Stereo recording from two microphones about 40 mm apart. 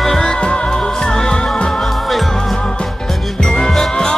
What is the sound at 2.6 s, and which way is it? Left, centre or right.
Music, left.